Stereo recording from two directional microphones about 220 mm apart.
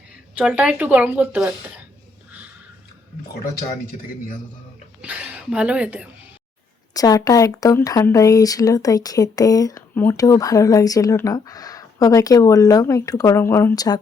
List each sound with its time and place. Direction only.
0.3 s a woman's voice: 5° right (ahead or behind)
5.0 s a woman's voice: 5° right (ahead or behind)
6.9 s speech: 15° left (ahead or behind)